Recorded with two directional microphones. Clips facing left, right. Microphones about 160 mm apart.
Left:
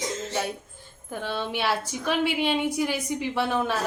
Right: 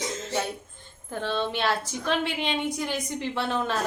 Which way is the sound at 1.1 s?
10° left (ahead or behind).